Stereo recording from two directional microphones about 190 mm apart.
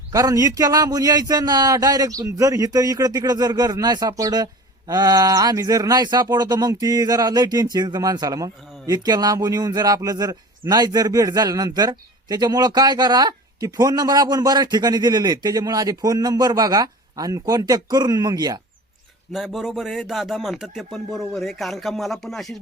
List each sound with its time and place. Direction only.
0.1 s a man's voice: 20° right (ahead or behind)
19.3 s speech: centre (ahead or behind)